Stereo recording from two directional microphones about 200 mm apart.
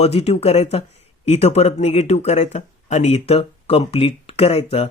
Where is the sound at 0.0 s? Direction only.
30° left (ahead or behind).